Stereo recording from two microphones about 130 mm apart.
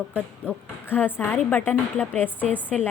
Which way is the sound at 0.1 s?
15° left (ahead or behind).